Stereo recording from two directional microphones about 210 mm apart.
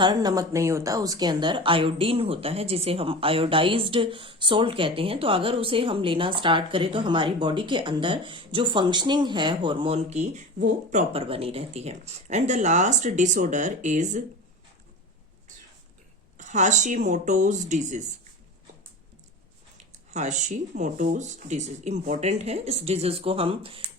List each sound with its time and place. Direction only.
0.0 s speech: 20° right (ahead or behind); by 14.2 s 35° right (ahead or behind)
16.4 s speech: 35° right (ahead or behind)
20.1 s speech: 35° right (ahead or behind)